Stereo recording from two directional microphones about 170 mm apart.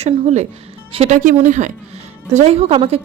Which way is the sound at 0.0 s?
40° right (ahead or behind).